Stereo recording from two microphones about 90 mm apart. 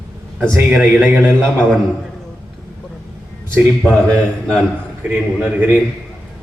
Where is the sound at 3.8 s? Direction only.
5° left (ahead or behind).